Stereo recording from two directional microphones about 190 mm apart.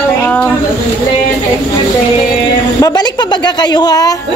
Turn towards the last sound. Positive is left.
turn(degrees=20)  # may be behind; listen again after turning